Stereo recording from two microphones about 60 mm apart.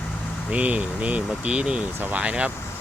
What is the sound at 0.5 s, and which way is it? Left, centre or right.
Speech, right.